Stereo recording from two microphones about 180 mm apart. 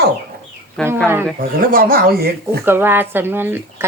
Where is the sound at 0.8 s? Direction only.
5° left (ahead or behind).